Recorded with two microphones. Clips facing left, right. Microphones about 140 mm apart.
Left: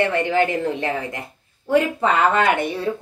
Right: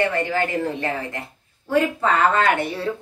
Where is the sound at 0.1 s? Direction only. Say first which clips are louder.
Left 3 dB; 20° left (ahead or behind).